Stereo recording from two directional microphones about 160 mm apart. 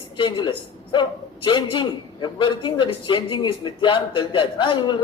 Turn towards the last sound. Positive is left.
turn(degrees=30)  # may be behind; listen again after turning